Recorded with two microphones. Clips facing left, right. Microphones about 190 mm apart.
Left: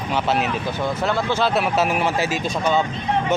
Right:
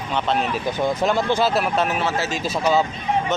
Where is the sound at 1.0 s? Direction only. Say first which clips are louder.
Right 1 dB; 15° right (ahead or behind).